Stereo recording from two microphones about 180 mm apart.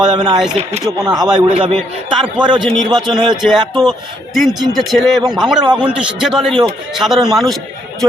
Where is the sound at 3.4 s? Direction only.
Centre (ahead or behind).